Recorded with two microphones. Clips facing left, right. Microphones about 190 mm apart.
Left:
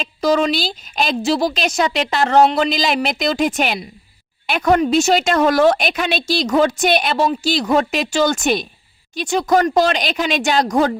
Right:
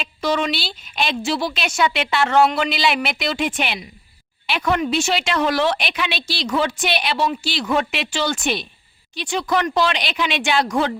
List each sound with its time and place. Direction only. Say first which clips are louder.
0.0 s a woman's voice: left 5 dB; 40° left (ahead or behind)